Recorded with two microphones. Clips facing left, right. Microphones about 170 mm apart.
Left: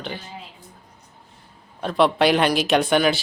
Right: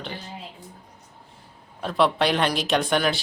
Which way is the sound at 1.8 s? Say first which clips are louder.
Left 3 dB; centre (ahead or behind).